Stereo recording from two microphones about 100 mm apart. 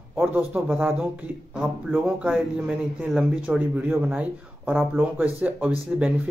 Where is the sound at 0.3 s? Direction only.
20° right (ahead or behind).